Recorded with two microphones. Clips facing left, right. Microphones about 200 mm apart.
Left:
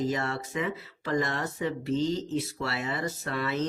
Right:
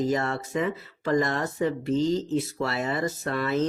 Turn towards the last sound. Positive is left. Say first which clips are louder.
# right 4 dB
turn(degrees=-45)  # may be behind; listen again after turning